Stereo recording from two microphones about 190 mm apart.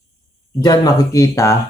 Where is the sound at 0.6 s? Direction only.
20° left (ahead or behind).